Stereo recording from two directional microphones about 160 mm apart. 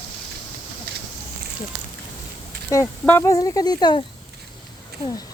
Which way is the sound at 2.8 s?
15° left (ahead or behind).